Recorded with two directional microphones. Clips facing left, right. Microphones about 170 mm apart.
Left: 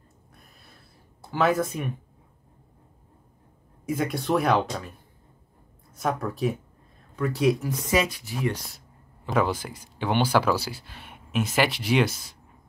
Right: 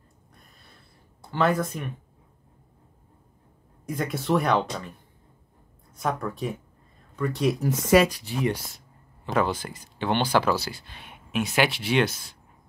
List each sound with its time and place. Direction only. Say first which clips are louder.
0.3 s a sound: left 1 dB; 5° left (ahead or behind)
1.2 s speech: left 1 dB; 5° left (ahead or behind)
3.8 s speech: left 2 dB; 5° left (ahead or behind)
5.9 s speech: left 1 dB; centre (ahead or behind)
7.7 s speech: right 6 dB; 70° right (ahead or behind)
8.3 s speech: right 2 dB; 20° right (ahead or behind)
8.7 s speech: left 1 dB; 5° left (ahead or behind)